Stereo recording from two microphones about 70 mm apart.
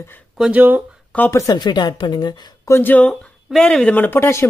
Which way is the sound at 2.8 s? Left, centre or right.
Left.